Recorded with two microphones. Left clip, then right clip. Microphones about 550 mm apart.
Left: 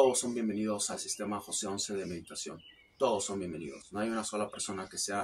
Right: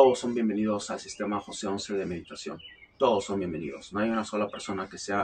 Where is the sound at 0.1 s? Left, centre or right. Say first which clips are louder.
Right 6 dB; left.